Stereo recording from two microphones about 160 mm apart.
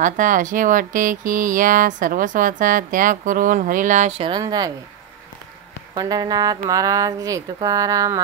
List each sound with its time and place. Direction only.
0.0 s speech: 55° right (ahead or behind); by 4.7 s 25° right (ahead or behind)
5.9 s speech: 25° right (ahead or behind)